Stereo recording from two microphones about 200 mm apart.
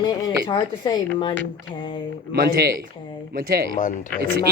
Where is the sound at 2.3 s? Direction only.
50° right (ahead or behind).